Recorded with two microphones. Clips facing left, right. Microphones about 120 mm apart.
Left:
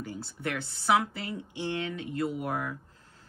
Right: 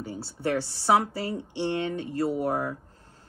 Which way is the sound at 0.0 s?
30° right (ahead or behind).